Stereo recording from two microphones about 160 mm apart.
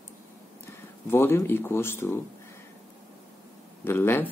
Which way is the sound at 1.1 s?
15° left (ahead or behind).